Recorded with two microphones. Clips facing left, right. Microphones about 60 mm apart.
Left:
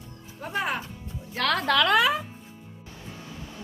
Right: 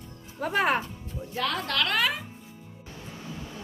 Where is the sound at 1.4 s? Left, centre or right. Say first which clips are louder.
Left 4 dB; left.